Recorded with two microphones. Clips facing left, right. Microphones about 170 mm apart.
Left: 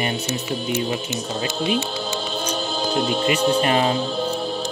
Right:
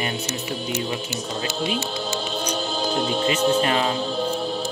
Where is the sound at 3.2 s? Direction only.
60° left (ahead or behind).